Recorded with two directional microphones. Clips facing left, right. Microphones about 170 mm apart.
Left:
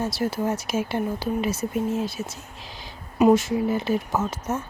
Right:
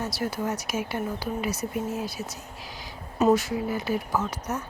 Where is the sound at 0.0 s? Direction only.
25° left (ahead or behind).